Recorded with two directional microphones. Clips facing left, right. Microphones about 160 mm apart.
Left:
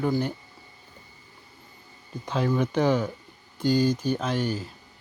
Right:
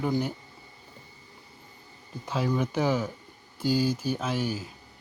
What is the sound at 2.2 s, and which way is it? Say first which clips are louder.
Speech: left 3 dB; 5° right (ahead or behind).